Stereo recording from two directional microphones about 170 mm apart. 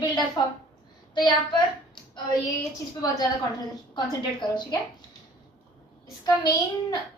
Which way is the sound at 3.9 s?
25° left (ahead or behind).